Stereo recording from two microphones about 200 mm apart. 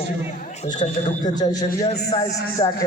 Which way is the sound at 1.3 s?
20° left (ahead or behind).